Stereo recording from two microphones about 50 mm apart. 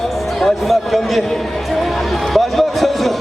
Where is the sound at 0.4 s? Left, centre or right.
Centre.